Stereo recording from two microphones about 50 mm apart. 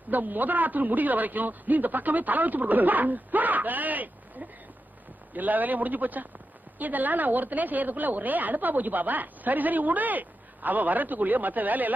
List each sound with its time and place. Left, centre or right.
0.1 s a woman's voice: right